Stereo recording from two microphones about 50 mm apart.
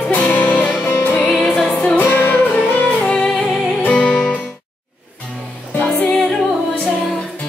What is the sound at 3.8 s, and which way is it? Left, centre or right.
Music, left.